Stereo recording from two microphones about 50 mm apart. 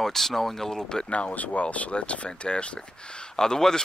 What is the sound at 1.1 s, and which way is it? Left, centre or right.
Speech, left.